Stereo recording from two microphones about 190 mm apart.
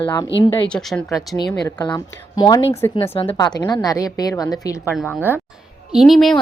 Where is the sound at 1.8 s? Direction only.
20° left (ahead or behind).